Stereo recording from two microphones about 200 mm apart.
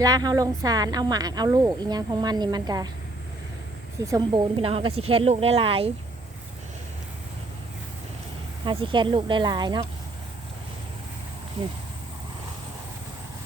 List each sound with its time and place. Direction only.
0.0 s speech: 20° right (ahead or behind)
4.0 s speech: 20° right (ahead or behind)
8.6 s speech: 25° right (ahead or behind)